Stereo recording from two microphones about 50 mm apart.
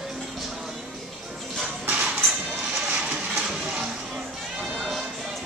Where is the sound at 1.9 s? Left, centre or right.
Right.